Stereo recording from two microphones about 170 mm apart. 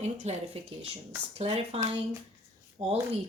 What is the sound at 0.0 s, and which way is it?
A woman's voice, 40° right (ahead or behind).